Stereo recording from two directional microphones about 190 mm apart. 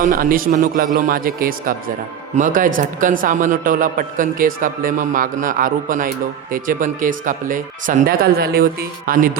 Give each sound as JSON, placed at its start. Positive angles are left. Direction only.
{"t": 0.0, "sound": "a man's voice", "side_deg": -45}